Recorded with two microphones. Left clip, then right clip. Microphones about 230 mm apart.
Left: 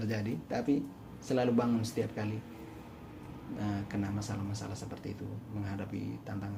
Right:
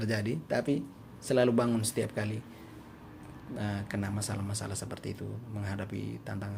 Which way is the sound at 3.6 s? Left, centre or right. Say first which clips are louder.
Right 1 dB; right.